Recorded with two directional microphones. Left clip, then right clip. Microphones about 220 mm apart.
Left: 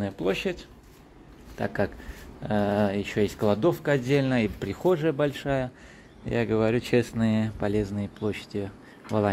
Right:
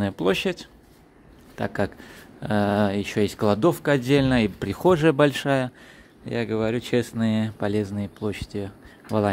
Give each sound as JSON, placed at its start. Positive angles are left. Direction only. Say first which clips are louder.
{"t": 0.0, "sound": "speech", "louder": "right 4 dB", "side_deg": -25}
{"t": 6.2, "sound": "speech", "louder": "left 1 dB", "side_deg": -5}